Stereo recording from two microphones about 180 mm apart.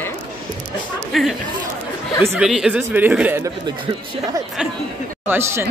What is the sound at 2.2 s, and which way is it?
Speech, 15° right (ahead or behind).